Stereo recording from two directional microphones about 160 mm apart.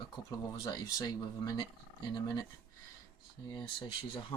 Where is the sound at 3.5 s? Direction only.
30° left (ahead or behind).